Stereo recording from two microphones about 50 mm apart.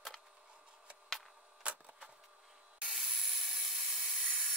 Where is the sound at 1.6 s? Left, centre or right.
Right.